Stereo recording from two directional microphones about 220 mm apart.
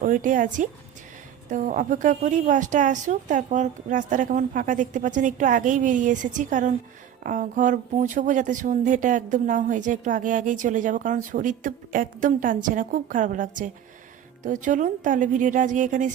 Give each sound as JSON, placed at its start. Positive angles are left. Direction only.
{"t": 0.0, "sound": "speech", "side_deg": -35}